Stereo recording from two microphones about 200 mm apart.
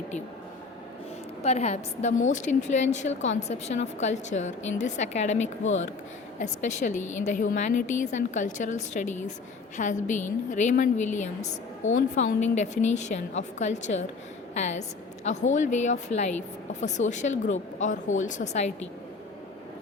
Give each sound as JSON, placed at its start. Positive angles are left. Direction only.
{"t": 1.4, "sound": "a woman's voice", "side_deg": 35}
{"t": 6.4, "sound": "a woman's voice", "side_deg": 35}